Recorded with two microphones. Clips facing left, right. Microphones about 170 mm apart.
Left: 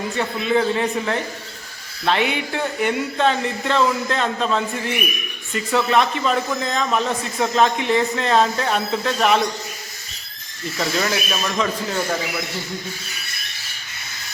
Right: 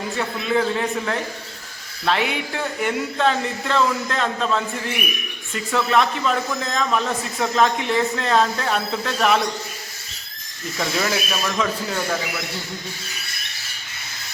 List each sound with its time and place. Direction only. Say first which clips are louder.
0.2 s a man's voice: left 2 dB; centre (ahead or behind)
10.8 s a man's voice: left 1 dB; centre (ahead or behind)